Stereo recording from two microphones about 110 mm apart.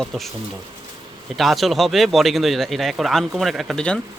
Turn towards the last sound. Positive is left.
turn(degrees=5)  # may be behind; listen again after turning